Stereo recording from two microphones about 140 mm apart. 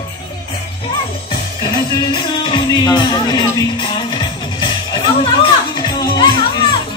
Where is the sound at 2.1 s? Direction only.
35° left (ahead or behind).